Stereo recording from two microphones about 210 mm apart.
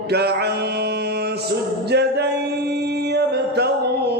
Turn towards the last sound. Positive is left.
turn(degrees=-50)  # may be behind; listen again after turning